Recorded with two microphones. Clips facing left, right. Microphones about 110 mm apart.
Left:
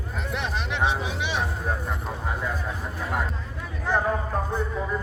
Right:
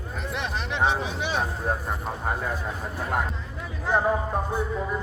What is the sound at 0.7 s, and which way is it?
Speech, 35° right (ahead or behind).